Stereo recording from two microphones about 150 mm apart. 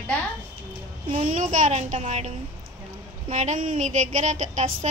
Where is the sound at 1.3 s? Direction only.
55° right (ahead or behind).